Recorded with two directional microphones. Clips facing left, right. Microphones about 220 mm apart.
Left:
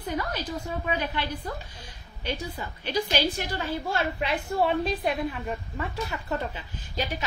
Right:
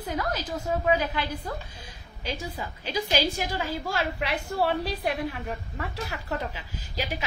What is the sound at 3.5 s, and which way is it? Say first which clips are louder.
Speech: left 1 dB; 90° right.